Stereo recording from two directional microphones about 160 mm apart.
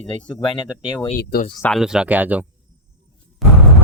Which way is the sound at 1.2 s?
75° left (ahead or behind).